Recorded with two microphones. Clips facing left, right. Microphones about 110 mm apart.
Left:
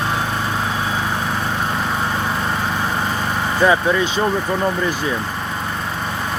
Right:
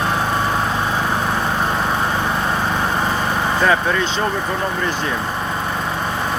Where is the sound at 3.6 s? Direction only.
10° left (ahead or behind).